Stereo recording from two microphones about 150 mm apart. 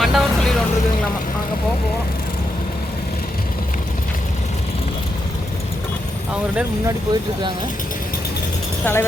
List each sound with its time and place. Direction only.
0.0 s vehicle: centre (ahead or behind)
6.8 s speech: 25° right (ahead or behind)
8.8 s speech: 15° left (ahead or behind)